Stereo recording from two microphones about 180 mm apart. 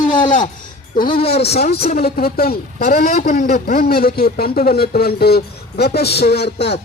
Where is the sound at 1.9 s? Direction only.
60° left (ahead or behind).